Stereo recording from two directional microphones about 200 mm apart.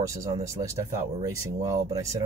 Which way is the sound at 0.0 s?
15° right (ahead or behind).